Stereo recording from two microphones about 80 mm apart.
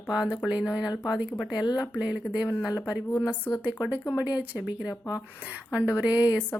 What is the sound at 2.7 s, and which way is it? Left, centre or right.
Speech, left.